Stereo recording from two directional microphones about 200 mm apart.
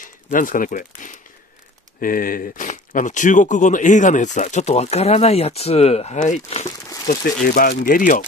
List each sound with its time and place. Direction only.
0.0 s speech: 40° left (ahead or behind)
7.4 s speech: 45° left (ahead or behind)